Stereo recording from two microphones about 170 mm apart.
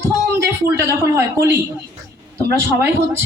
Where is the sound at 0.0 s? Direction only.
15° right (ahead or behind).